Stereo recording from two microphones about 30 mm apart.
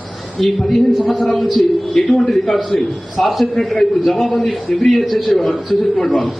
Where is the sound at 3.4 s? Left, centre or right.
Centre.